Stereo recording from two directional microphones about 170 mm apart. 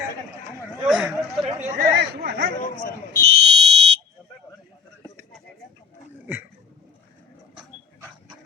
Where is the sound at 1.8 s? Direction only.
70° right (ahead or behind).